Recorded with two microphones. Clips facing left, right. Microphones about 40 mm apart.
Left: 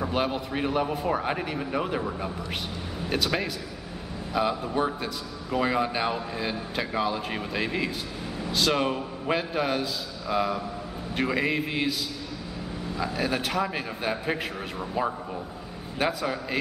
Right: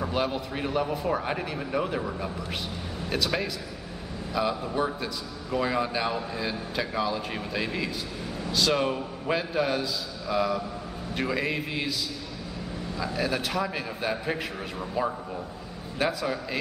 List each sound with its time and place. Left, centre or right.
0.0 s a man's voice: centre
12.9 s a man's voice: centre
16.0 s a man's voice: centre